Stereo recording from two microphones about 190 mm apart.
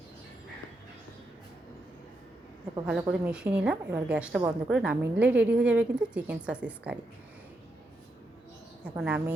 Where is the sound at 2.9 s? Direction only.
5° right (ahead or behind).